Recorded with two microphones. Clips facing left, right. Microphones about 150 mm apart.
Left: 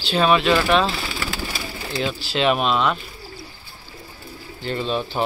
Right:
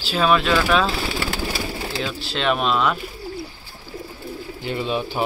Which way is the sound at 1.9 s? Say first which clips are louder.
Left 2 dB; centre (ahead or behind).